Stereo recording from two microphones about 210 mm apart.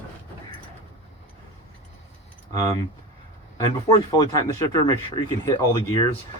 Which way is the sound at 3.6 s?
15° left (ahead or behind).